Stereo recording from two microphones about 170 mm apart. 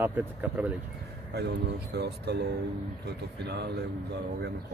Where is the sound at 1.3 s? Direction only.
75° right (ahead or behind).